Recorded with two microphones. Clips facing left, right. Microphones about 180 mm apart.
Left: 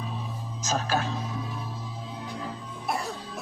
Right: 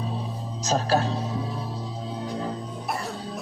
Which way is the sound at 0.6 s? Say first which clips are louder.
Right 5 dB; 35° right (ahead or behind).